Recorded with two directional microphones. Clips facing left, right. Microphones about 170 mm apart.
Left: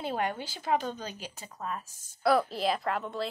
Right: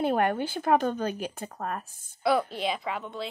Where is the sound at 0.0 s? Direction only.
55° right (ahead or behind).